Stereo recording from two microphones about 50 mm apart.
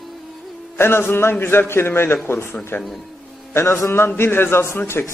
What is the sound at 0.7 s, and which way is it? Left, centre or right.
A man's voice, left.